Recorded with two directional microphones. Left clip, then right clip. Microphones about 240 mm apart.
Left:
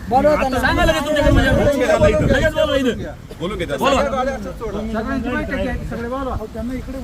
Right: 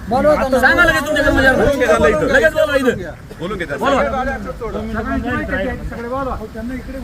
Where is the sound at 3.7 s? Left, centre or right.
Left.